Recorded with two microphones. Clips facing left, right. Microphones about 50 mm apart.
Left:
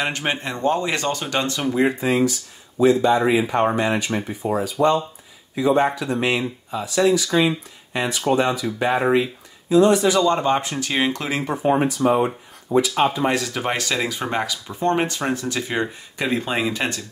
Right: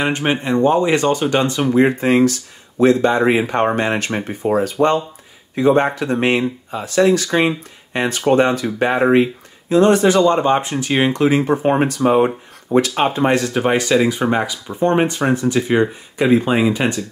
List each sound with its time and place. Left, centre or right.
0.0 s speech: centre
1.7 s speech: right
2.0 s speech: right
10.3 s speech: right
11.5 s speech: right
12.7 s speech: right
13.2 s speech: right
13.5 s speech: centre